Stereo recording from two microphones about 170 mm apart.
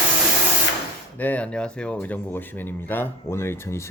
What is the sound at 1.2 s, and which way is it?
Speech, 10° left (ahead or behind).